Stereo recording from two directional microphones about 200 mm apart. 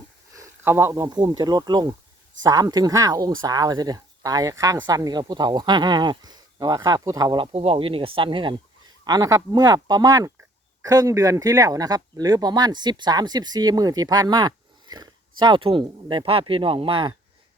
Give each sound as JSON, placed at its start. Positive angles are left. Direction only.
{"t": 0.3, "sound": "speech", "side_deg": -10}